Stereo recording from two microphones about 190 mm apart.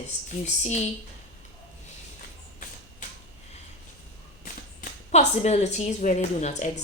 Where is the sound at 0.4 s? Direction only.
35° left (ahead or behind).